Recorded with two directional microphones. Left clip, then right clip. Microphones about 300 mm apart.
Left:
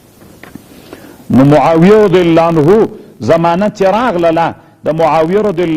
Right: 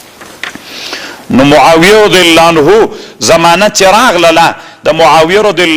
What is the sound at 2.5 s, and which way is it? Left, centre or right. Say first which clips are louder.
Speech: right 4 dB; right.